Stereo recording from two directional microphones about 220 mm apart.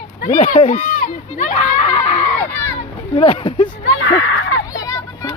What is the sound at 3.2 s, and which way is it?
Speech, 25° left (ahead or behind).